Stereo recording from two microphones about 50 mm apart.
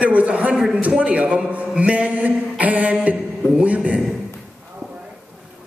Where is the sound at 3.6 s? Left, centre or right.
Right.